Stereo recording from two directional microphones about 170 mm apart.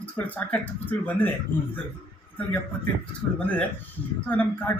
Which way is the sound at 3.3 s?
10° left (ahead or behind).